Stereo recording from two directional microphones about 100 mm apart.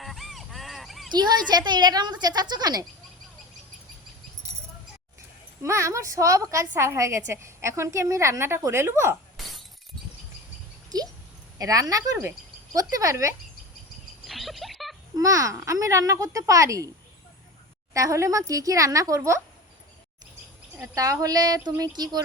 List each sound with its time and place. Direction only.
0.0 s a sound: centre (ahead or behind)
1.1 s speech: 45° right (ahead or behind)
5.6 s a woman's voice: 30° right (ahead or behind)
10.8 s a sound: 40° right (ahead or behind)
11.5 s speech: 35° right (ahead or behind)
14.3 s a sound: centre (ahead or behind)
15.1 s speech: 35° right (ahead or behind)
17.9 s speech: 35° right (ahead or behind)
20.8 s speech: 35° right (ahead or behind)